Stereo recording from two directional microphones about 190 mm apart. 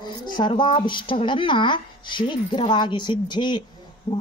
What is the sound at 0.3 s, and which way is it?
Speech, 25° left (ahead or behind).